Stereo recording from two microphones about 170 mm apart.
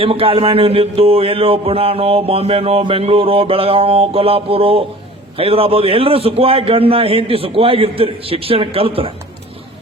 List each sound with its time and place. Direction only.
0.0 s speech: 35° right (ahead or behind)